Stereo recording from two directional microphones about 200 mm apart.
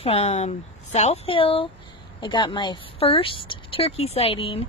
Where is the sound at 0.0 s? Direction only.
30° left (ahead or behind).